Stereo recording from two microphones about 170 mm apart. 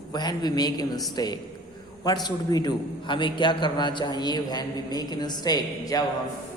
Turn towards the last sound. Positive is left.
turn(degrees=20)  # may be behind; listen again after turning